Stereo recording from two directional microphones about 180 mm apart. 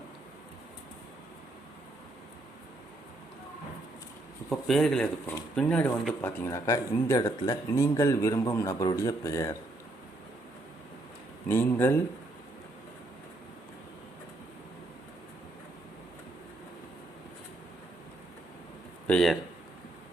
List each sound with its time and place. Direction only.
4.4 s speech: centre (ahead or behind)
11.4 s speech: 10° left (ahead or behind)
19.0 s speech: 5° left (ahead or behind)